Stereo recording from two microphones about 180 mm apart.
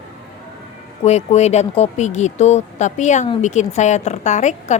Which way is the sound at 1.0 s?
40° left (ahead or behind).